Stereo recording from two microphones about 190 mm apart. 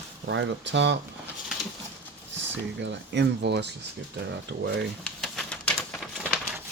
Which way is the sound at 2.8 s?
70° right (ahead or behind).